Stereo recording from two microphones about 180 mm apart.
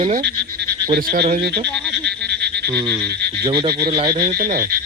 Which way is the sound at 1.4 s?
65° right (ahead or behind).